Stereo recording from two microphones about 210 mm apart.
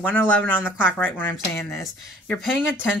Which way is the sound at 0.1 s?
10° left (ahead or behind).